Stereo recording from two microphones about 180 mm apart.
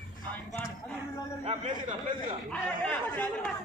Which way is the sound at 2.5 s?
5° left (ahead or behind).